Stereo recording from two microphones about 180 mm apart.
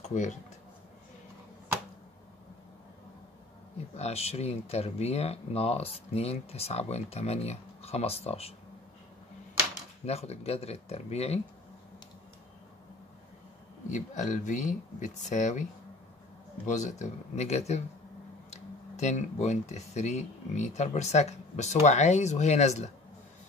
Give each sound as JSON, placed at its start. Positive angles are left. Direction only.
{"t": 0.0, "sound": "speech", "side_deg": 40}
{"t": 3.9, "sound": "speech", "side_deg": 35}
{"t": 10.0, "sound": "speech", "side_deg": 35}
{"t": 13.8, "sound": "speech", "side_deg": 45}
{"t": 16.6, "sound": "speech", "side_deg": 40}